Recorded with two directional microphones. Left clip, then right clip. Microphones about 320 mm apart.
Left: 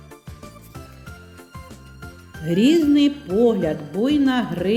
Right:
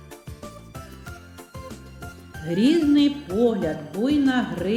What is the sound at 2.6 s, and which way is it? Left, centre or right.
Speech, left.